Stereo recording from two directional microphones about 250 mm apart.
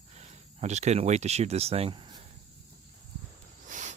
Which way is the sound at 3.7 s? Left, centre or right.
Right.